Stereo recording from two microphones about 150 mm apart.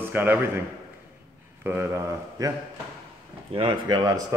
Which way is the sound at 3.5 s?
35° right (ahead or behind).